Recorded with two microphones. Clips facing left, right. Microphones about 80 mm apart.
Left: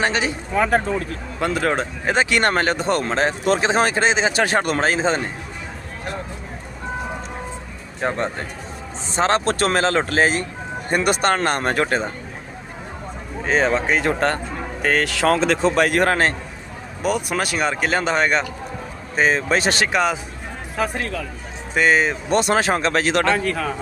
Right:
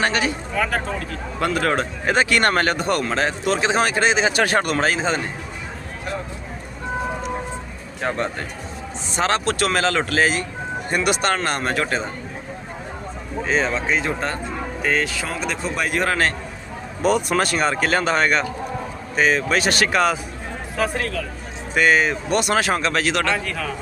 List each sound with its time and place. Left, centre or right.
0.0 s speech: left
8.0 s speech: left
13.4 s speech: left
13.8 s speech: left
16.0 s speech: left
17.0 s speech: centre
19.1 s speech: left